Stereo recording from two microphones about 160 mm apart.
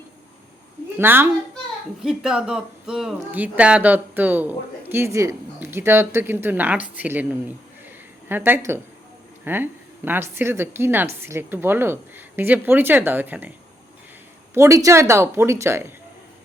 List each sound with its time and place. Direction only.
0.9 s speech: 15° right (ahead or behind)
2.0 s speech: 5° right (ahead or behind)
14.5 s speech: 20° right (ahead or behind)